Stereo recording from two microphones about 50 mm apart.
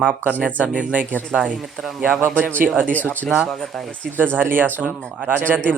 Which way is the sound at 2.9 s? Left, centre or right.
Left.